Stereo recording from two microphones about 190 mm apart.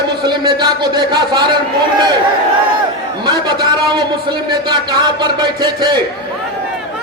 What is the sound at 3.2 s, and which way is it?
A man's voice, 20° right (ahead or behind).